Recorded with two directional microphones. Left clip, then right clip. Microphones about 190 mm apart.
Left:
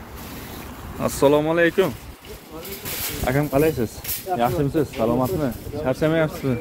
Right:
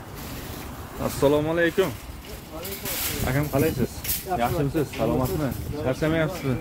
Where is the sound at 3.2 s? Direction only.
50° left (ahead or behind).